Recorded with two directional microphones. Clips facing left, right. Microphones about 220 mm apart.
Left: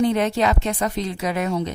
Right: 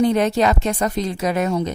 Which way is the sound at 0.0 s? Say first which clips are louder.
Right 3 dB; 40° right (ahead or behind).